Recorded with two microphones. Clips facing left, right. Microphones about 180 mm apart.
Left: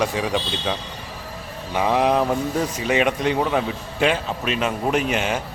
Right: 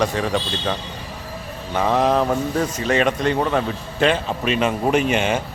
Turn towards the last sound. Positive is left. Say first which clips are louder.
# right 3 dB
turn(degrees=0)  # may be behind; listen again after turning